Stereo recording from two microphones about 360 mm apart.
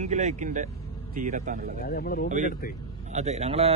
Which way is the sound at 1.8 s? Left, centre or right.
Left.